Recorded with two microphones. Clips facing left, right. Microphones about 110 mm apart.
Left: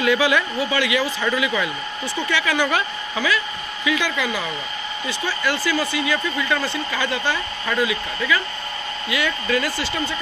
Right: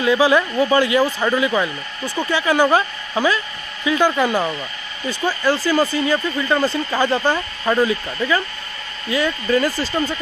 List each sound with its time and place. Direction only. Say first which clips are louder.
0.0 s speech: right 3 dB; 30° right (ahead or behind)